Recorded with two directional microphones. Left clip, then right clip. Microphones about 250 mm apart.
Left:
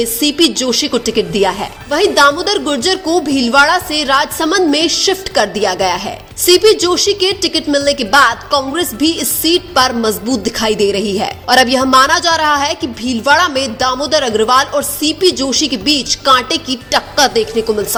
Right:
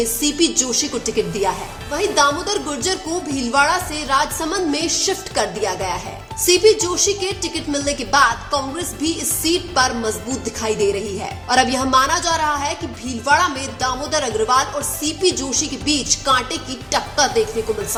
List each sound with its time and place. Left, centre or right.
0.0 s a woman's voice: left